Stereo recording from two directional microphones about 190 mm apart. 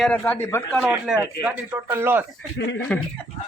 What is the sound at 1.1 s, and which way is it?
Speech, 5° right (ahead or behind).